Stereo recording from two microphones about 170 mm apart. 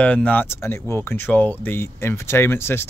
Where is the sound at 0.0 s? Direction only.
10° left (ahead or behind).